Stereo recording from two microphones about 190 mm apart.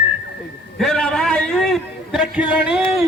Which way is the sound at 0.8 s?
5° left (ahead or behind).